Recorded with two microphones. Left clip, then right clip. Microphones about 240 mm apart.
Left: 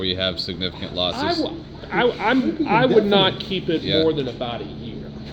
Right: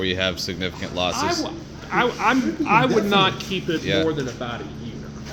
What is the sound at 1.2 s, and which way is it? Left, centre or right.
Speech, right.